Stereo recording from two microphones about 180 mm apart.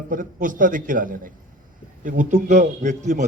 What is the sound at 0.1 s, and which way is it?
A man's voice, 50° right (ahead or behind).